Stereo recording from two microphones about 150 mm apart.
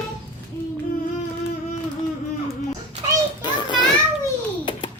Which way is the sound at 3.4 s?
30° left (ahead or behind).